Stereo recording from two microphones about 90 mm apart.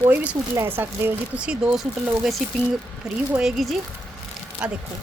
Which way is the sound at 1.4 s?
10° right (ahead or behind).